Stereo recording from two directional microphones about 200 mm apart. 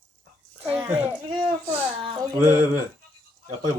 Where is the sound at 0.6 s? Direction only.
10° right (ahead or behind).